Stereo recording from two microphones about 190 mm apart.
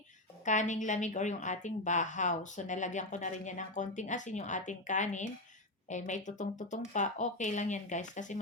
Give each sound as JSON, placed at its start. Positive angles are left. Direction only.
{"t": 0.4, "sound": "a woman's voice", "side_deg": 40}